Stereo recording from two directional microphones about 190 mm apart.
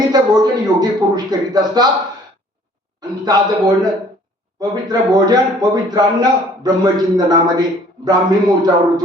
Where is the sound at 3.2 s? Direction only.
20° right (ahead or behind).